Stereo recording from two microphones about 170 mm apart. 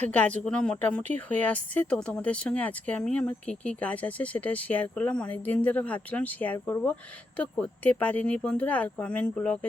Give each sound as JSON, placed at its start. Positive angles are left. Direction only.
{"t": 0.0, "sound": "speech", "side_deg": 10}